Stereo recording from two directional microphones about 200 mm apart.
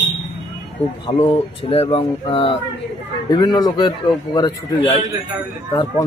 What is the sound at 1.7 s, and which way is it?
A man's voice, 30° left (ahead or behind).